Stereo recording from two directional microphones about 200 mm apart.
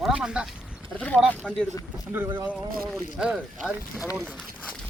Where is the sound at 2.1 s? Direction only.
10° right (ahead or behind).